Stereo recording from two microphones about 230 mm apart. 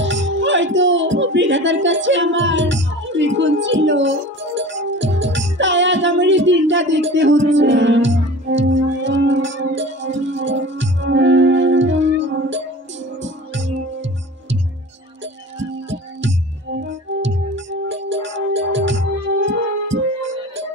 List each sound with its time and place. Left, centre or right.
0.0 s music: right
15.9 s music: right